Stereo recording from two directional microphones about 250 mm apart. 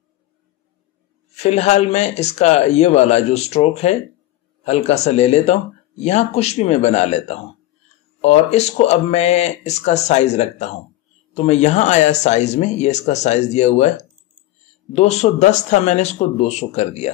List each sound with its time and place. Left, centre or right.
1.3 s speech: left